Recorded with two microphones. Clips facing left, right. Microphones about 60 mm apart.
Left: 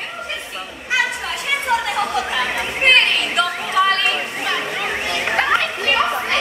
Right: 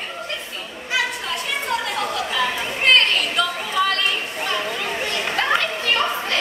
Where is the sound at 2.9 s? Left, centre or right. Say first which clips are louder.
Left 1 dB; left.